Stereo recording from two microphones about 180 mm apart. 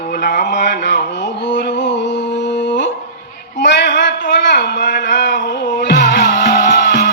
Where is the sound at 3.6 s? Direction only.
75° left (ahead or behind).